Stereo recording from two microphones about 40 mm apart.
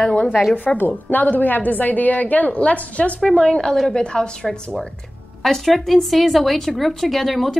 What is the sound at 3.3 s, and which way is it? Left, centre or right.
A woman's voice, left.